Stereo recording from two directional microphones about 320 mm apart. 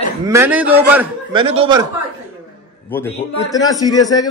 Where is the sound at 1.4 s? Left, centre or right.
Centre.